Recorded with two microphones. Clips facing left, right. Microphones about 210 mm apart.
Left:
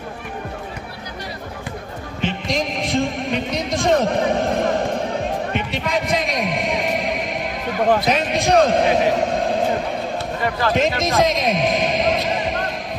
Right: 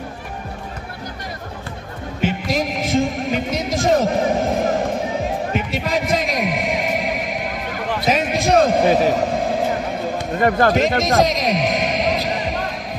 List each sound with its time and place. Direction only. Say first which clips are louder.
2.2 s music: right 2 dB; 5° right (ahead or behind)
8.0 s a sound: right 1 dB; centre (ahead or behind)
10.4 s speech: right 6 dB; 50° right (ahead or behind)
11.0 s music: right 1 dB; centre (ahead or behind)